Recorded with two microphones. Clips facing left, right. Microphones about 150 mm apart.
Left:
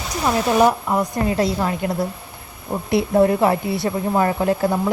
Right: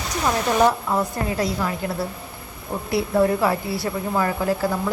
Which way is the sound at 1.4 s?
25° left (ahead or behind).